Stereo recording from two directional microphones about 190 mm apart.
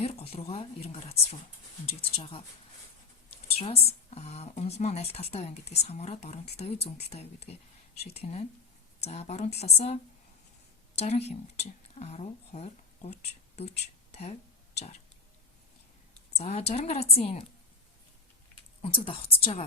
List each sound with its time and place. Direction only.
0.0 s a woman's voice: 30° left (ahead or behind)
3.6 s speech: 30° left (ahead or behind)
16.4 s speech: 35° left (ahead or behind)
18.8 s a woman's voice: 30° left (ahead or behind)